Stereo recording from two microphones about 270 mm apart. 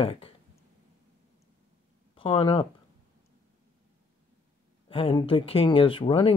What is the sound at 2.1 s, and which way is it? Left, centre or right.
Speech, centre.